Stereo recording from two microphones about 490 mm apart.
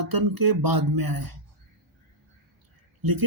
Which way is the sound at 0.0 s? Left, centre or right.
Right.